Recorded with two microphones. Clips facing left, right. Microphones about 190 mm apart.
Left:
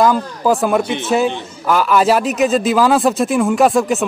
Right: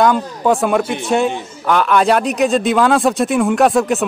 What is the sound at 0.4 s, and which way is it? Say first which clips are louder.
A man's voice: even; centre (ahead or behind).